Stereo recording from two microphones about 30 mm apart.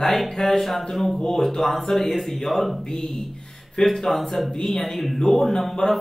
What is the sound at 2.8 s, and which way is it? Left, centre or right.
Speech, left.